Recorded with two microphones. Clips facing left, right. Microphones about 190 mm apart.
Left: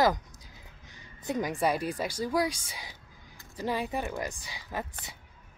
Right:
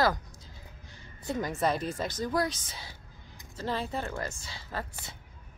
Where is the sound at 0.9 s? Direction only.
15° left (ahead or behind).